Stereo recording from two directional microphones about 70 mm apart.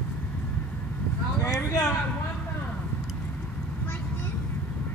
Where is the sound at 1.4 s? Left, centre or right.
Left.